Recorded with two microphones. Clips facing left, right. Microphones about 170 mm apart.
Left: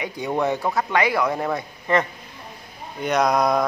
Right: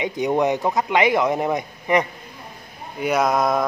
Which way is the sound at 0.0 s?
20° right (ahead or behind).